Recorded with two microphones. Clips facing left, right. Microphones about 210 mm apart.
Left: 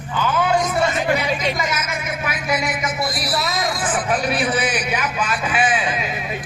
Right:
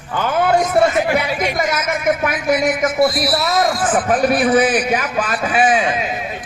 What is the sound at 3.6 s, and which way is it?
A man's voice, 50° right (ahead or behind).